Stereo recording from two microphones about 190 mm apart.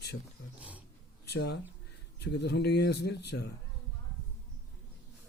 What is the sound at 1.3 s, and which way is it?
Speech, 60° left (ahead or behind).